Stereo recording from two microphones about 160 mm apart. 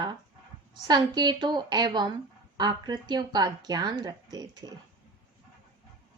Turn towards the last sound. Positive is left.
turn(degrees=-25)  # may be behind; listen again after turning